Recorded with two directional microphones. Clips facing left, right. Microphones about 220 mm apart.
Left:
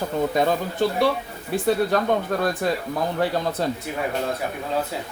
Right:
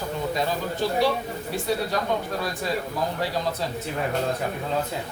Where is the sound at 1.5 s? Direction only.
55° left (ahead or behind).